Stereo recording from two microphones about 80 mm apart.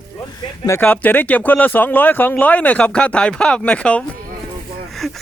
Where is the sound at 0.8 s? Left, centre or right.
Left.